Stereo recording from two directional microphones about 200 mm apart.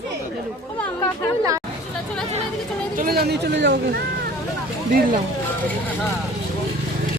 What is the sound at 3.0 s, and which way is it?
Speech, 50° right (ahead or behind).